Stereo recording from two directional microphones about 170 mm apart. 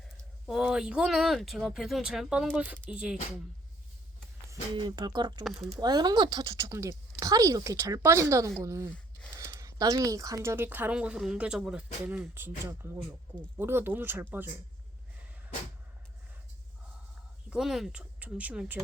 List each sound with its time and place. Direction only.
0.4 s speech: 5° right (ahead or behind)
4.7 s speech: 25° right (ahead or behind)
5.4 s speech: centre (ahead or behind)
5.8 s speech: 25° right (ahead or behind)
17.5 s speech: centre (ahead or behind)